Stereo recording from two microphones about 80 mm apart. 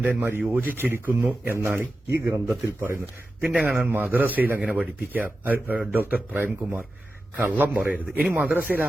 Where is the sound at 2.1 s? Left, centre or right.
Right.